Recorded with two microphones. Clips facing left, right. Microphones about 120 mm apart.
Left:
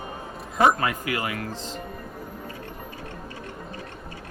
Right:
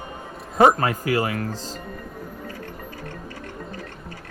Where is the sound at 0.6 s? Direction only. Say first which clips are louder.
Right 2 dB; 35° right (ahead or behind).